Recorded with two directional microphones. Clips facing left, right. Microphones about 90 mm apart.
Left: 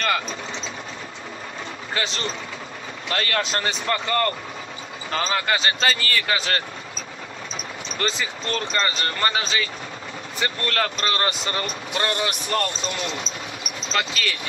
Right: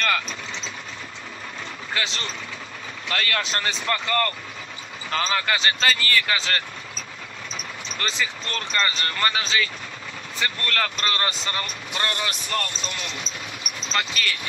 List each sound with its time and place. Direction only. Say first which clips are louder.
0.0 s sewing machine: left 1 dB; 25° left (ahead or behind)
2.0 s speech: left 3 dB; 30° left (ahead or behind)
8.2 s speech: left 2 dB; 30° left (ahead or behind)